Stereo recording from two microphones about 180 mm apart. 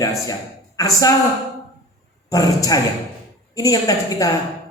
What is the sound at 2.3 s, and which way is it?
A man's voice, 20° left (ahead or behind).